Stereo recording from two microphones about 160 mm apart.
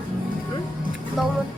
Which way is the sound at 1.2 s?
Centre (ahead or behind).